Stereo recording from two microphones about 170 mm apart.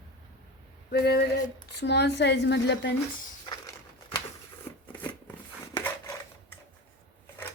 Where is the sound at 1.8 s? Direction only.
80° left.